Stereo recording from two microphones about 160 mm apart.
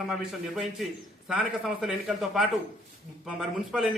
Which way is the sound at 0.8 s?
Centre (ahead or behind).